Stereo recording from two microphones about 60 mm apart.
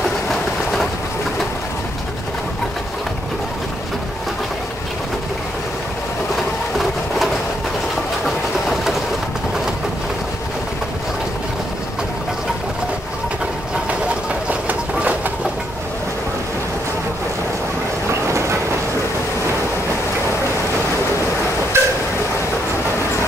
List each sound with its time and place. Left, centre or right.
14.5 s train: right
21.7 s vehicle: right